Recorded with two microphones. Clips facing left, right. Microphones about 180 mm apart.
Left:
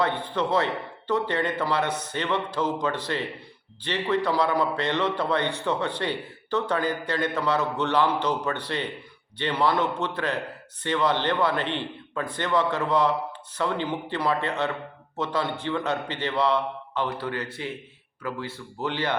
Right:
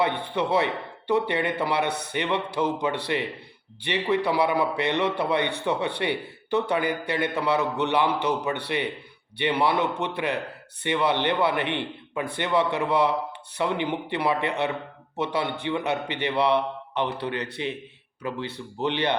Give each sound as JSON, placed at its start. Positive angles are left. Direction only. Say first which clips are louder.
{"t": 0.3, "sound": "a man's voice", "louder": "right 1 dB", "side_deg": -10}